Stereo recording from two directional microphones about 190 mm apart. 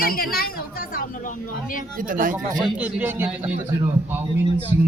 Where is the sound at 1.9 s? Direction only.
45° right (ahead or behind).